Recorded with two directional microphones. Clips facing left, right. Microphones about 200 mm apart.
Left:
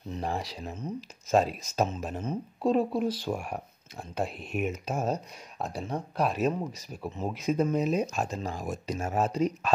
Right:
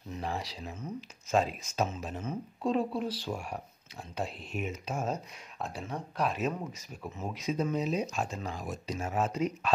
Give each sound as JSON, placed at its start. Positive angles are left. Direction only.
{"t": 0.1, "sound": "speech", "side_deg": 45}
{"t": 0.8, "sound": "speech", "side_deg": 40}
{"t": 7.3, "sound": "speech", "side_deg": 55}